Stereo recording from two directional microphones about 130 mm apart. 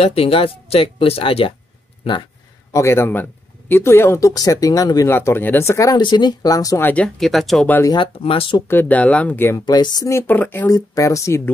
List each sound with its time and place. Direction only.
0.0 s speech: 50° left (ahead or behind)
2.7 s speech: 20° left (ahead or behind)
6.8 s speech: 10° left (ahead or behind)
7.2 s speech: centre (ahead or behind)
8.0 s speech: 45° left (ahead or behind)
8.6 s speech: 15° left (ahead or behind)
9.7 s speech: 30° left (ahead or behind); by 10.7 s 15° left (ahead or behind)
10.7 s speech: 25° left (ahead or behind)